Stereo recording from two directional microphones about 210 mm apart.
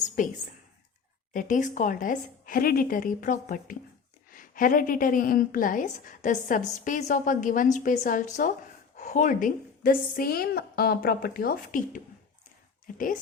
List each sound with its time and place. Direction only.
0.2 s a woman's voice: 40° left (ahead or behind)